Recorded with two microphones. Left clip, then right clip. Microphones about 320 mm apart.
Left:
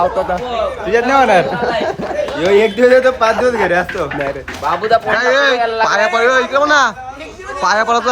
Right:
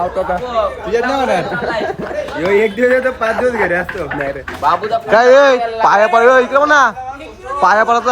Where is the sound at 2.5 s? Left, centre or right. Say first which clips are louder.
Left 3 dB; centre.